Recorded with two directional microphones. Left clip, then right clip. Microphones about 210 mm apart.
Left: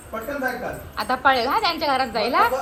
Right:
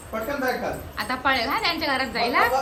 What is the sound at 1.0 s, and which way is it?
A child's voice, 10° right (ahead or behind).